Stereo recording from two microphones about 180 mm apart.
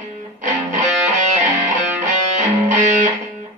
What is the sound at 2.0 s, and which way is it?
Music, 40° right (ahead or behind).